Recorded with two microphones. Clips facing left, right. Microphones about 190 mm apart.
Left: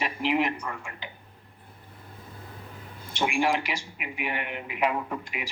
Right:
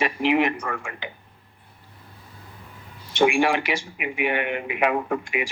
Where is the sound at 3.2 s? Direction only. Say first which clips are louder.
Right 6 dB; 90° right.